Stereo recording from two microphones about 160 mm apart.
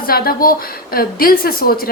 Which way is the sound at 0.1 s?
65° left (ahead or behind).